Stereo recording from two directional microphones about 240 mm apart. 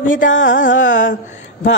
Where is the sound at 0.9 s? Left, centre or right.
Left.